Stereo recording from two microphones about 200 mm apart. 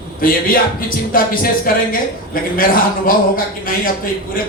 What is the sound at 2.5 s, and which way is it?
Speech, 45° left (ahead or behind).